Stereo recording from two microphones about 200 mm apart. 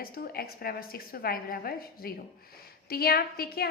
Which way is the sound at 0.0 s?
50° left (ahead or behind).